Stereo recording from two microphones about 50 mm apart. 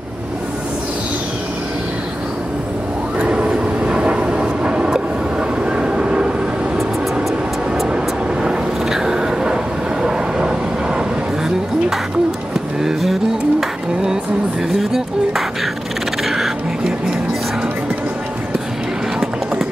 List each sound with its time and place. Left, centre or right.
3.2 s vehicle: right
7.2 s music: centre
7.9 s vehicle: centre
12.8 s music: centre
14.7 s a sound: centre